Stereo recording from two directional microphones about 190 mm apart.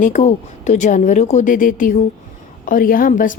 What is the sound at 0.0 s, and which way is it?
A woman's voice, 40° left (ahead or behind).